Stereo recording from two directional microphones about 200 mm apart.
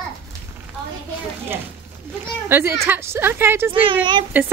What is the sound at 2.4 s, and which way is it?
A woman's voice, 10° right (ahead or behind).